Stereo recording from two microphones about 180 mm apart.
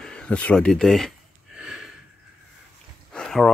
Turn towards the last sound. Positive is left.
turn(degrees=5)  # may be behind; listen again after turning